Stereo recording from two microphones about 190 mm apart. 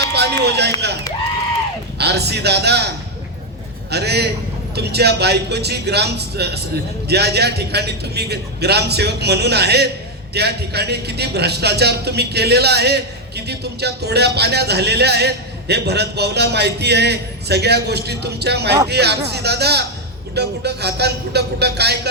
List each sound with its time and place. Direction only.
0.1 s a sound: 60° right (ahead or behind)
2.0 s a man's voice: 60° right (ahead or behind)
3.9 s a man's voice: 60° right (ahead or behind)